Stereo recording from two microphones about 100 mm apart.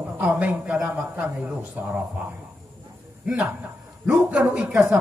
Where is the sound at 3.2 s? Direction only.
5° right (ahead or behind).